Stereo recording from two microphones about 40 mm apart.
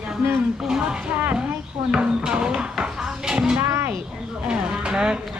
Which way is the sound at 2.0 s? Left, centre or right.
Right.